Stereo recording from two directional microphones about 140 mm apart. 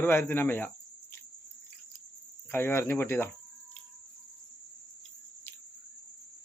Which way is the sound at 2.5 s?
20° left (ahead or behind).